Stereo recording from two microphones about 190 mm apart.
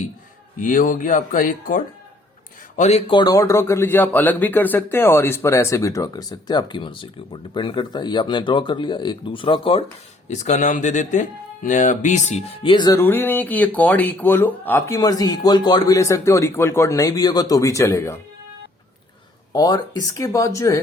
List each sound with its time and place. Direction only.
0.6 s speech: 45° left (ahead or behind)
3.1 s speech: 20° left (ahead or behind)
12.7 s speech: 20° left (ahead or behind)
19.5 s speech: 20° left (ahead or behind)